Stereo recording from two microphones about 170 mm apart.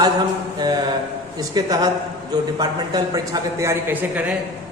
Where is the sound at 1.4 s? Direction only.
25° right (ahead or behind).